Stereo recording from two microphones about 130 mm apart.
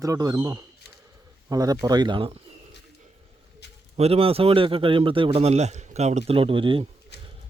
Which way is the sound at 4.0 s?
50° right (ahead or behind).